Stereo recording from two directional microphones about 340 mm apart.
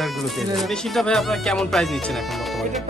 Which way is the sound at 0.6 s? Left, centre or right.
Centre.